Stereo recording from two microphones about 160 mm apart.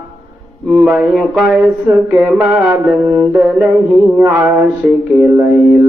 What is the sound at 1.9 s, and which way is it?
Mantra, 15° right (ahead or behind).